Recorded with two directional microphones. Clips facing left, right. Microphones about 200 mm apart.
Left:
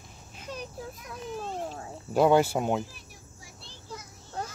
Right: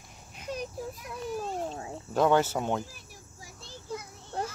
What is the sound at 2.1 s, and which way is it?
Speech, 10° left (ahead or behind).